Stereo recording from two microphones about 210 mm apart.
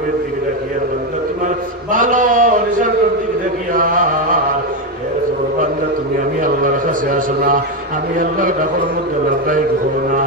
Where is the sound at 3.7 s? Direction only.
40° right (ahead or behind).